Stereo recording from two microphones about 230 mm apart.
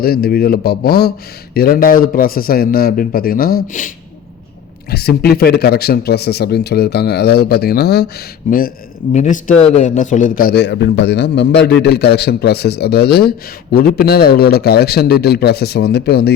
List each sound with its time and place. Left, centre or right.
0.0 s a man's voice: left